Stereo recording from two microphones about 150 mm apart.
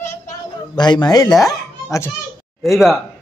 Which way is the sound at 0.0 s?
20° left (ahead or behind).